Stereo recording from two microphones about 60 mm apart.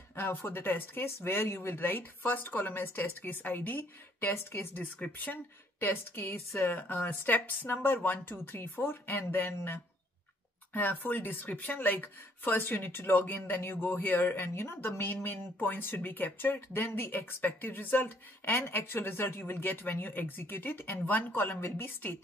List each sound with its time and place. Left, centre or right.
0.1 s speech: left
4.3 s a woman's voice: left
5.0 s speech: left